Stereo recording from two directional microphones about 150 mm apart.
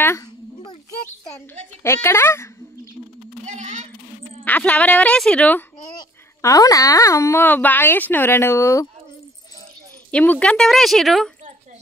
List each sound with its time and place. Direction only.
1.8 s speech: 15° left (ahead or behind)
3.4 s a sound: 50° right (ahead or behind)
4.5 s speech: 10° left (ahead or behind)
5.9 s speech: 25° left (ahead or behind)
10.1 s speech: 10° left (ahead or behind)